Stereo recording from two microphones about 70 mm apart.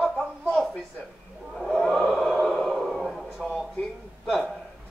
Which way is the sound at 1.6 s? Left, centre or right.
Centre.